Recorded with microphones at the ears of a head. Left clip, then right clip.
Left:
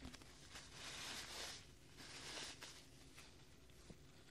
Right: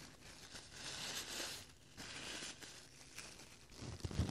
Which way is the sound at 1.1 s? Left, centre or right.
Right.